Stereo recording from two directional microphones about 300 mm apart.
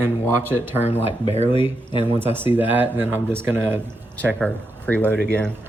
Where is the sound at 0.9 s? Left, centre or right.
Centre.